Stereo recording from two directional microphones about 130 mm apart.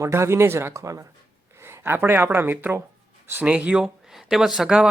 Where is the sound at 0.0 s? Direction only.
20° right (ahead or behind).